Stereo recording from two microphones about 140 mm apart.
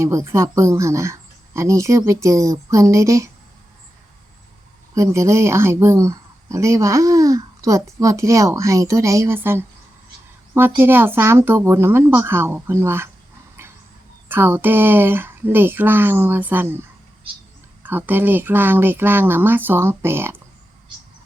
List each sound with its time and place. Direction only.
0.0 s speech: 20° right (ahead or behind)
4.9 s speech: 20° right (ahead or behind)
10.8 s speech: 15° right (ahead or behind)
13.6 s a sound: 15° right (ahead or behind)
14.3 s speech: 15° right (ahead or behind)
17.8 s speech: 15° right (ahead or behind)